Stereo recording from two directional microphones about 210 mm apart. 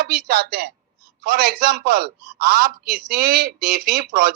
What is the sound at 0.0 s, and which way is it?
A woman's voice, 50° right (ahead or behind).